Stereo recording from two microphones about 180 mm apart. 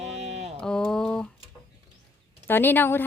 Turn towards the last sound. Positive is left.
turn(degrees=10)  # may be behind; listen again after turning